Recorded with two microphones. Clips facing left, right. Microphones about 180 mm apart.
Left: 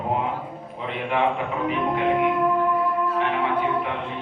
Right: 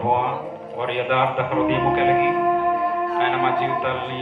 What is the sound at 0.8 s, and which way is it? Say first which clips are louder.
A man's voice: right 2 dB; 75° right (ahead or behind).